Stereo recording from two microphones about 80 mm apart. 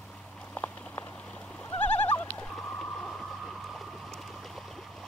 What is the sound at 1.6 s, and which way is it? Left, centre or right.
Bleat, centre.